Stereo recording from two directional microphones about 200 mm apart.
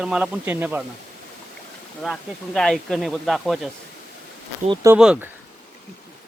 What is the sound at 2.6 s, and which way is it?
Speech, centre (ahead or behind).